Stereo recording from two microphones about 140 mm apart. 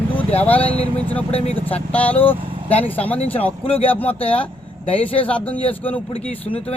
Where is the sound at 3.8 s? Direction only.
10° left (ahead or behind).